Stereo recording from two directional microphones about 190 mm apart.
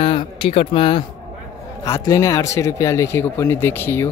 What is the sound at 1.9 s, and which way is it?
A man's voice, 15° left (ahead or behind).